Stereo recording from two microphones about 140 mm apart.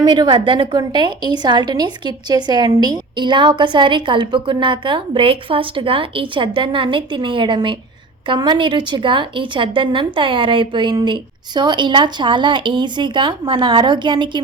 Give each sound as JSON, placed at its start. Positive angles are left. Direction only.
{"t": 0.0, "sound": "a woman's voice", "side_deg": -30}